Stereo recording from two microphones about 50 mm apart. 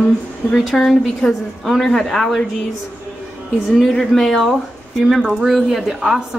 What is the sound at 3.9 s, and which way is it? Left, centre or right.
A woman's voice, centre.